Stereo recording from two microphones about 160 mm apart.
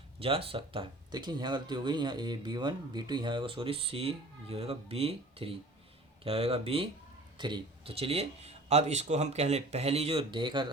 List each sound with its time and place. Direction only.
0.2 s speech: 35° right (ahead or behind)